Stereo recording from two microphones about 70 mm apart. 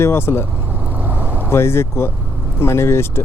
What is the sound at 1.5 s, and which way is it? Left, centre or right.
Speech, left.